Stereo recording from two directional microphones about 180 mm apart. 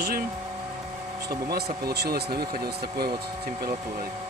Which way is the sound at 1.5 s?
60° right (ahead or behind).